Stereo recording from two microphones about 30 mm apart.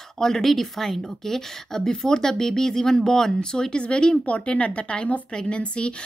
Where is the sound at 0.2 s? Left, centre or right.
Centre.